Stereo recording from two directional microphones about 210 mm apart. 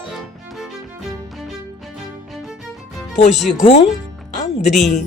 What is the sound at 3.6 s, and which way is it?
Speech, 35° left (ahead or behind).